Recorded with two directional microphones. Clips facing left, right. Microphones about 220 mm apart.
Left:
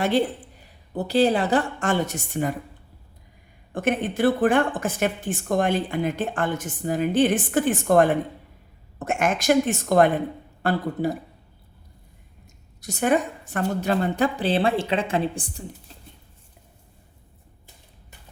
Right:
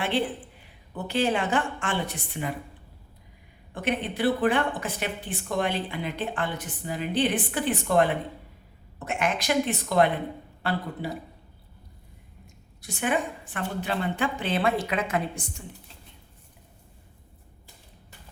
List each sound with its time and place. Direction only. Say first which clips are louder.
0.0 s a woman's voice: left 5 dB; 40° left (ahead or behind)
3.8 s a woman's voice: left 5 dB; 45° left (ahead or behind)
12.8 s a woman's voice: left 6 dB; 40° left (ahead or behind)